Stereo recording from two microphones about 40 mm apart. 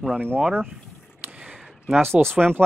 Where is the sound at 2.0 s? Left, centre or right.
Right.